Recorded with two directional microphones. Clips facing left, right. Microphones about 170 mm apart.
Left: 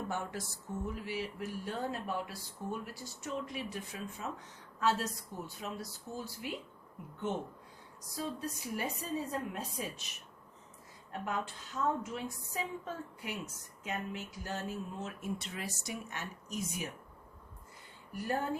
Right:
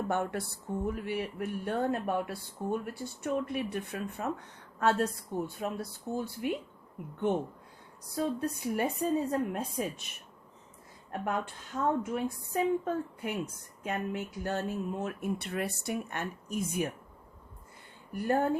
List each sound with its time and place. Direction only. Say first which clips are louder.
0.1 s speech: right 7 dB; 60° right (ahead or behind)
18.1 s speech: right 7 dB; 55° right (ahead or behind)